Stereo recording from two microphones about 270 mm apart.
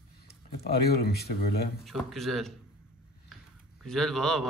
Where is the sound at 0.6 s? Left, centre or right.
Left.